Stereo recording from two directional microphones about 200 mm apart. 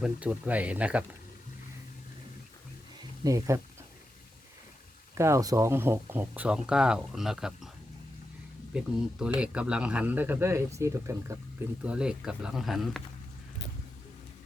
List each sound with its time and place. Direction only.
0.0 s speech: 5° right (ahead or behind)
3.2 s speech: 15° right (ahead or behind)
5.1 s speech: 15° right (ahead or behind)
8.7 s speech: 5° right (ahead or behind)